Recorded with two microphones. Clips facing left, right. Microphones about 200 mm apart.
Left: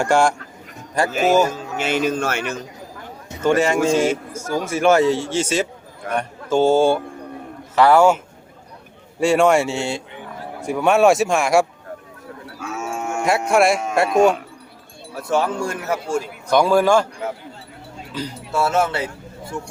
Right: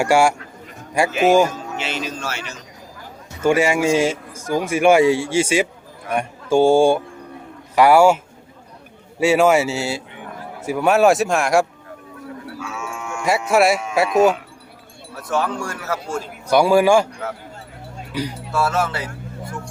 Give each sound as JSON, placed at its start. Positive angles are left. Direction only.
{"t": 0.0, "sound": "speech", "side_deg": -10}
{"t": 1.8, "sound": "a man's voice", "side_deg": 50}
{"t": 3.4, "sound": "speech", "side_deg": -10}
{"t": 9.2, "sound": "speech", "side_deg": -5}
{"t": 12.5, "sound": "livestock", "side_deg": 40}
{"t": 13.2, "sound": "speech", "side_deg": 0}
{"t": 15.1, "sound": "speech", "side_deg": 25}
{"t": 16.5, "sound": "speech", "side_deg": -10}
{"t": 18.1, "sound": "speech", "side_deg": -15}
{"t": 18.5, "sound": "speech", "side_deg": 25}